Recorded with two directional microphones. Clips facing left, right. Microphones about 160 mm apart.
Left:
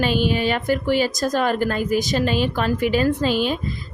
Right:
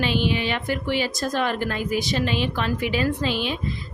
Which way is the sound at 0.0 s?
45° left (ahead or behind).